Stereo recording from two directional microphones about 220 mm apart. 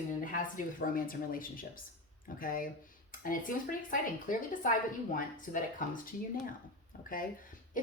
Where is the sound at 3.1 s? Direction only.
40° left (ahead or behind).